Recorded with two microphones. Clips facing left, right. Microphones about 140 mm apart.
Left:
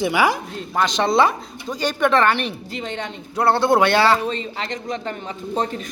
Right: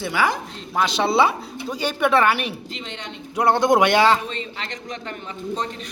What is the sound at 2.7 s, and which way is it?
Speech, 50° left (ahead or behind).